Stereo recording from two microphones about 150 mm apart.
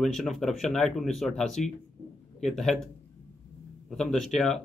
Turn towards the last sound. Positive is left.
turn(degrees=5)  # may be behind; listen again after turning